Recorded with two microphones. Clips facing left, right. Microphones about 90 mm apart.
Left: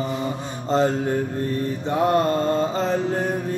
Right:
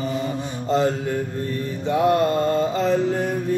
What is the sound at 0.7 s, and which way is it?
Mantra, 35° left (ahead or behind).